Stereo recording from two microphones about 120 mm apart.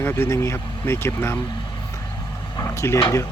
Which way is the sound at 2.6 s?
20° left (ahead or behind).